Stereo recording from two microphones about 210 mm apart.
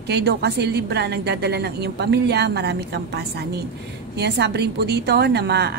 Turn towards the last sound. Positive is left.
turn(degrees=-50)  # may be behind; listen again after turning